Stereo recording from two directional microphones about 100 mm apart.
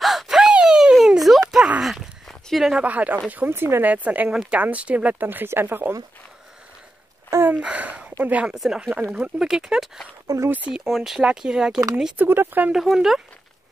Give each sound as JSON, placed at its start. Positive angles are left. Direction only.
{"t": 0.0, "sound": "gasp", "side_deg": 0}
{"t": 1.5, "sound": "dog", "side_deg": -5}
{"t": 2.8, "sound": "speech", "side_deg": -15}
{"t": 7.2, "sound": "a sound", "side_deg": -25}
{"t": 7.5, "sound": "speech", "side_deg": -15}
{"t": 10.2, "sound": "speech", "side_deg": -35}
{"t": 10.7, "sound": "speech", "side_deg": 0}
{"t": 12.7, "sound": "speech", "side_deg": -5}